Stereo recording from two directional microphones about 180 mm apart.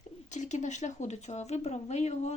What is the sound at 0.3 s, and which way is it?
Speech, 40° left (ahead or behind).